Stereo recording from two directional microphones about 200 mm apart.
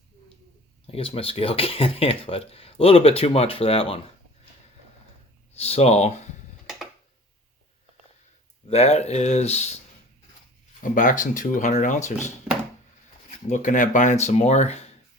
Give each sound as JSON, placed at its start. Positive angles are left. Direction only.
{"t": 0.9, "sound": "speech", "side_deg": 30}
{"t": 5.5, "sound": "speech", "side_deg": 30}
{"t": 8.6, "sound": "speech", "side_deg": 30}
{"t": 10.9, "sound": "speech", "side_deg": 40}
{"t": 13.5, "sound": "speech", "side_deg": 40}